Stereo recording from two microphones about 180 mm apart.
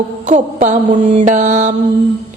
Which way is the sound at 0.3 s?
40° right (ahead or behind).